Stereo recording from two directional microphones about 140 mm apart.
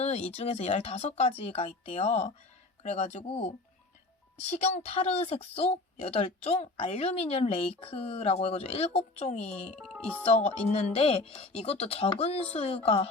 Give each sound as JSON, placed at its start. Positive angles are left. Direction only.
{"t": 0.0, "sound": "a woman's voice", "side_deg": 50}
{"t": 9.6, "sound": "speech", "side_deg": 5}
{"t": 10.2, "sound": "a woman's voice", "side_deg": 50}